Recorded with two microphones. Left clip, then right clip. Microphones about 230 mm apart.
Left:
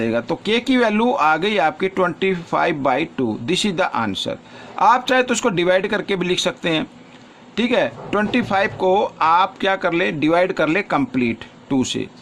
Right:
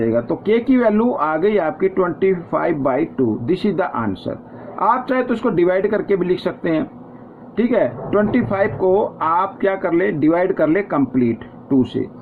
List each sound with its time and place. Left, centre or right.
0.0 s speech: left